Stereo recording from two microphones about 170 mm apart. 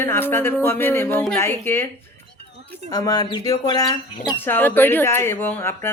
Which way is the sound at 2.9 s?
25° left (ahead or behind).